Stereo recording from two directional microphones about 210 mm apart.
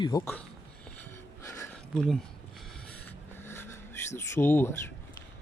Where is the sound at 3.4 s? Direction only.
10° left (ahead or behind).